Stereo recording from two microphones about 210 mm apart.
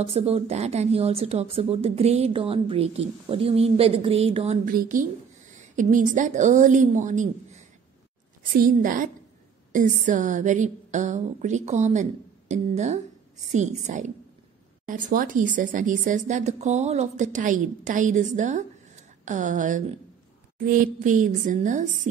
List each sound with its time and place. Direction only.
0.0 s speech: 30° right (ahead or behind)
4.6 s speech: 40° right (ahead or behind)